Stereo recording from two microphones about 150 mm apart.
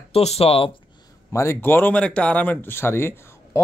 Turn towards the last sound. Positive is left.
turn(degrees=15)  # may be behind; listen again after turning